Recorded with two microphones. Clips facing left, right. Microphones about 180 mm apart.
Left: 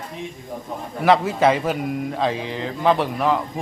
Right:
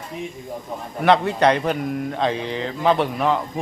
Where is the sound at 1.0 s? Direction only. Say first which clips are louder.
Even; centre (ahead or behind).